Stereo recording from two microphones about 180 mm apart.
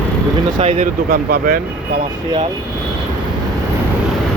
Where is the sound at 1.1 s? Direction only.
55° right (ahead or behind).